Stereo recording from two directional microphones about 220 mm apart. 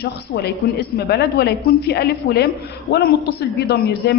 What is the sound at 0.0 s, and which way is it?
A woman's voice, 50° left (ahead or behind).